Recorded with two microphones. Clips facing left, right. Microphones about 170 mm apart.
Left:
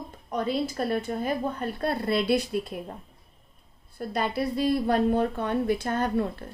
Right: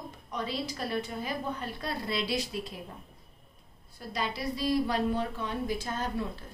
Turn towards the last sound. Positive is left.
turn(degrees=60)  # may be behind; listen again after turning